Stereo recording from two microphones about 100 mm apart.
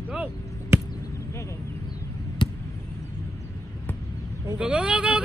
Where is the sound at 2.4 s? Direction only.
50° left (ahead or behind).